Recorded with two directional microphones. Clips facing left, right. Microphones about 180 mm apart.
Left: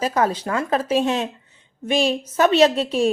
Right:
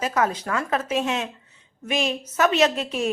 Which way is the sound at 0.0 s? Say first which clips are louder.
Left 3 dB; 30° left (ahead or behind).